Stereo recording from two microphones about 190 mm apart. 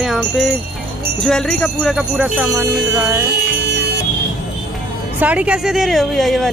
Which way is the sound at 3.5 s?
60° right (ahead or behind).